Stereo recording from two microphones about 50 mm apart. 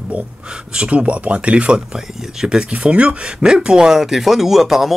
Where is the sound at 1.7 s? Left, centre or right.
Centre.